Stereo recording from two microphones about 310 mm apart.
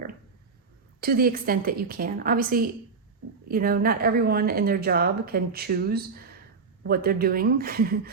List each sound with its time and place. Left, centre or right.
1.0 s speech: right